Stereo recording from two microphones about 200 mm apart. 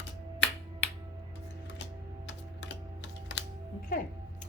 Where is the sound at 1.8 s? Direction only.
60° left (ahead or behind).